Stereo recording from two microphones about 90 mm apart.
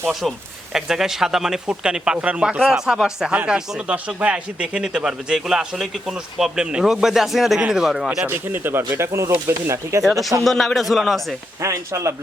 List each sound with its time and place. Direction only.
0.1 s speech: centre (ahead or behind)
8.3 s speech: 20° right (ahead or behind)
10.0 s speech: centre (ahead or behind)
11.6 s speech: 35° right (ahead or behind)